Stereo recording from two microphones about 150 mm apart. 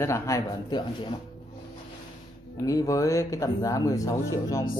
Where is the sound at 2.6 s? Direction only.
20° left (ahead or behind).